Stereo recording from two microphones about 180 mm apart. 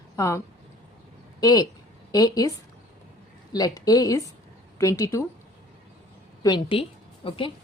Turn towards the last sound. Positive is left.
turn(degrees=30)  # may be behind; listen again after turning